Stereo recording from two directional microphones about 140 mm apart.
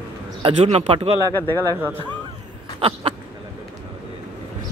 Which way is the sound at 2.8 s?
40° right (ahead or behind).